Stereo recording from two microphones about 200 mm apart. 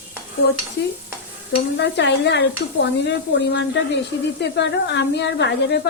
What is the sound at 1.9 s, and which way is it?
Speech, 60° left (ahead or behind).